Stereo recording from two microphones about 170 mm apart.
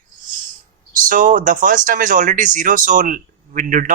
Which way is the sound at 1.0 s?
50° right (ahead or behind).